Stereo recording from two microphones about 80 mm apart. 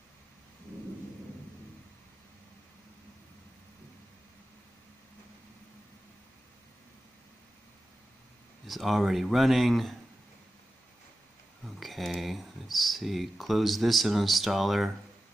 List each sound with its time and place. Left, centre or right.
8.6 s speech: centre
11.6 s speech: centre